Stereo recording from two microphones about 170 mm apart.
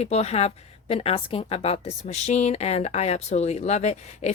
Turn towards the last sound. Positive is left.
turn(degrees=40)  # may be behind; listen again after turning